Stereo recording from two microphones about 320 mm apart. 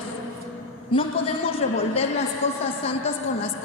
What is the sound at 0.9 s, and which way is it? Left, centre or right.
A woman's voice, centre.